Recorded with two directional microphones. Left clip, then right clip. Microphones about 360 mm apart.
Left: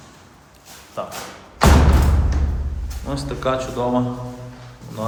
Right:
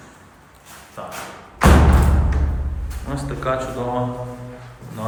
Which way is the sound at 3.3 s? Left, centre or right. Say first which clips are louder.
Left 1 dB; centre.